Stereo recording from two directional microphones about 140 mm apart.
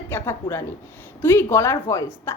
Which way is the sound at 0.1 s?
20° left (ahead or behind).